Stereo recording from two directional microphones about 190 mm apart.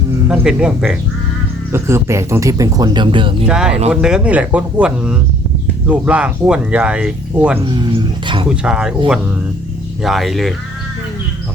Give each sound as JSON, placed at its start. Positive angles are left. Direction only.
{"t": 0.3, "sound": "speech", "side_deg": -5}
{"t": 1.7, "sound": "speech", "side_deg": -15}
{"t": 3.4, "sound": "speech", "side_deg": -5}
{"t": 7.6, "sound": "speech", "side_deg": -25}
{"t": 8.4, "sound": "speech", "side_deg": -5}
{"t": 10.0, "sound": "speech", "side_deg": 0}